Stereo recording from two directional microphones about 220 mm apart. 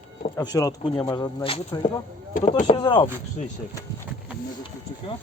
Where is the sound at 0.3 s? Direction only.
15° left (ahead or behind).